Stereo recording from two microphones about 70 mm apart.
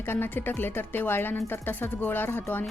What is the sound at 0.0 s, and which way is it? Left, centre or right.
Speech, left.